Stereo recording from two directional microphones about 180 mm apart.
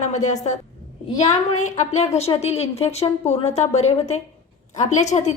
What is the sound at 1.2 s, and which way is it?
A woman's voice, 40° left (ahead or behind).